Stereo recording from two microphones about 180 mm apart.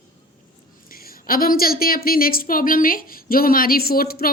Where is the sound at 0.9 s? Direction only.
55° left (ahead or behind).